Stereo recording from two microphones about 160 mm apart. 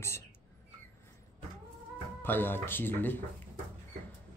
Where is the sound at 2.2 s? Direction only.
10° left (ahead or behind).